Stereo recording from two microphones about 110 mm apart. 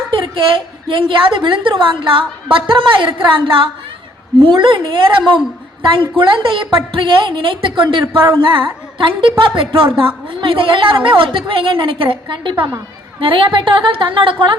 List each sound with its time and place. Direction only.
0.1 s a woman's voice: 50° right (ahead or behind)